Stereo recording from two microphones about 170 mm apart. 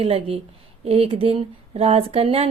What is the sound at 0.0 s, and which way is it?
Speech, 35° right (ahead or behind).